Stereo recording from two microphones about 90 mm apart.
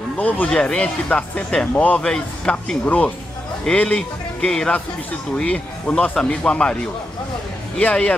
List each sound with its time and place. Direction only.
0.2 s speech: 20° left (ahead or behind)
7.8 s speech: 15° left (ahead or behind)